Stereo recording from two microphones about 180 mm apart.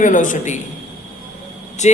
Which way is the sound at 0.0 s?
45° left (ahead or behind).